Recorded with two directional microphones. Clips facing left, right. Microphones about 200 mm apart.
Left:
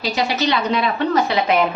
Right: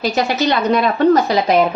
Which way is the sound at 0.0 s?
50° right (ahead or behind).